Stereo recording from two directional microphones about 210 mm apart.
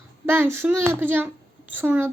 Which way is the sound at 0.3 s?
10° right (ahead or behind).